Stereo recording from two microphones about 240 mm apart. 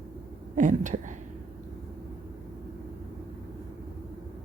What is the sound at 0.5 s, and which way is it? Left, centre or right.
Speech, right.